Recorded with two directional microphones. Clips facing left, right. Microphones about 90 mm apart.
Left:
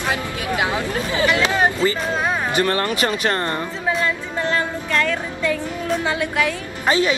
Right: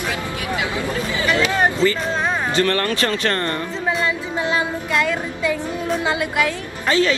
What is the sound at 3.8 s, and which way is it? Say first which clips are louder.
Music: right 1 dB; centre (ahead or behind).